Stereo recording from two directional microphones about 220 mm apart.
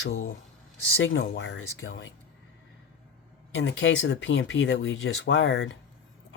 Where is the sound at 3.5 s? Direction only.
55° left (ahead or behind).